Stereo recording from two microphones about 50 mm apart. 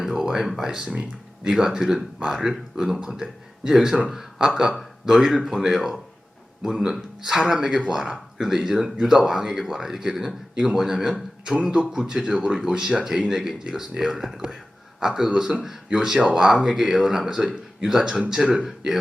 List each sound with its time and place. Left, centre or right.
0.0 s speech: centre